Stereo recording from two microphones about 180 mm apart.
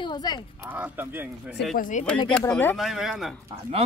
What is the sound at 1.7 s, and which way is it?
Speech, 45° left (ahead or behind).